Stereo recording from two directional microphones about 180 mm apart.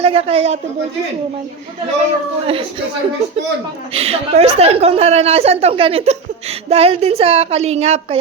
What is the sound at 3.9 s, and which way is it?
A woman's voice, 35° right (ahead or behind).